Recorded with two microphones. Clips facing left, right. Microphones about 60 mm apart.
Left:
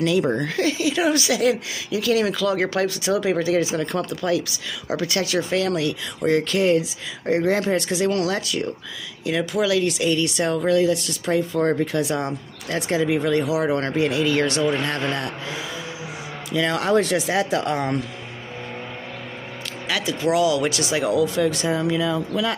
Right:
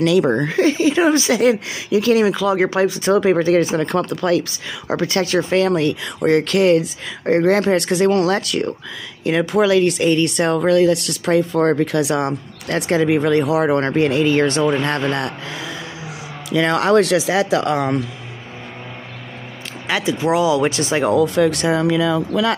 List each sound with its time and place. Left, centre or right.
0.0 s speech: right
0.5 s speech: right
2.2 s speech: right
3.0 s speech: right
4.4 s speech: right
9.2 s speech: right
14.6 s speech: right
19.9 s speech: right
21.4 s speech: right